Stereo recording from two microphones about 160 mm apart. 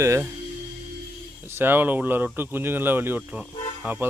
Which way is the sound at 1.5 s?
15° right (ahead or behind).